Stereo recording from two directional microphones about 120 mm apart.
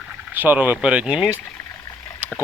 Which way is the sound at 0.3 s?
15° right (ahead or behind).